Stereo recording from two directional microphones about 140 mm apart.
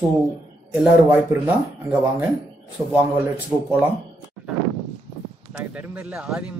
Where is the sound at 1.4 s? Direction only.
10° right (ahead or behind).